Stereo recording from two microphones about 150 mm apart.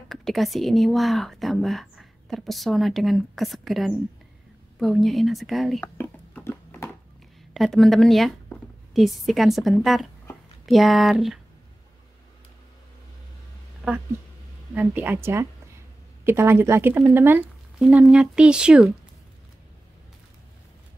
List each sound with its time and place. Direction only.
0.1 s speech: centre (ahead or behind)
5.9 s a sound: 15° left (ahead or behind)
7.5 s speech: centre (ahead or behind)
14.7 s speech: 10° right (ahead or behind)
17.7 s speech: 5° right (ahead or behind)